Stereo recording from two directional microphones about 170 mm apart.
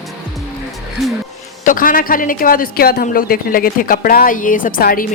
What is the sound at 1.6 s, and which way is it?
Speech, 55° left (ahead or behind).